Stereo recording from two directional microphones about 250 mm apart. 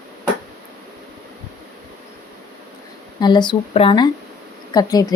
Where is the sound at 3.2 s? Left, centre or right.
Centre.